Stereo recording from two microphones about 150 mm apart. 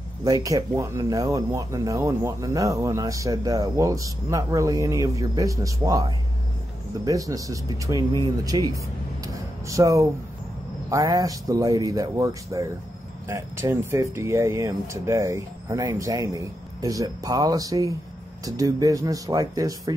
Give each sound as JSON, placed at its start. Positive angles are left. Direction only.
{"t": 0.2, "sound": "speech", "side_deg": -25}
{"t": 9.2, "sound": "a sound", "side_deg": -20}
{"t": 10.9, "sound": "speech", "side_deg": -20}